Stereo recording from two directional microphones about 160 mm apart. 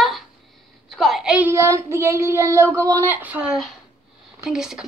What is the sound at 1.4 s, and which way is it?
A woman's voice, 20° right (ahead or behind).